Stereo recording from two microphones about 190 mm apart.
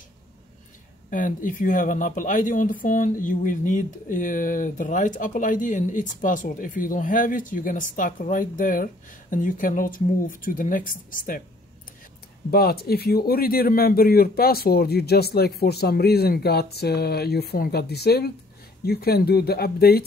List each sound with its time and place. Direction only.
1.1 s speech: 45° left (ahead or behind)
12.4 s speech: 55° left (ahead or behind)